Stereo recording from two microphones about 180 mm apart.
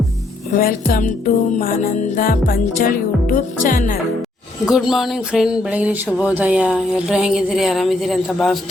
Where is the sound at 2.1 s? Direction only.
50° left (ahead or behind).